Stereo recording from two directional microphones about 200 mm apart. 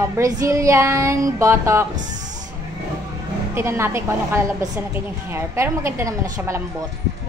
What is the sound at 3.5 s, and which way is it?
A woman's voice, 10° right (ahead or behind).